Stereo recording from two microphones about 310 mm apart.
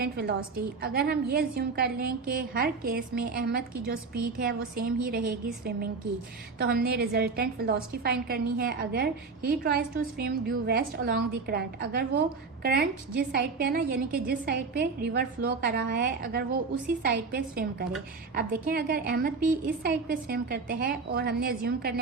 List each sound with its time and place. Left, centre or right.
0.0 s a woman's voice: right
6.6 s a woman's voice: right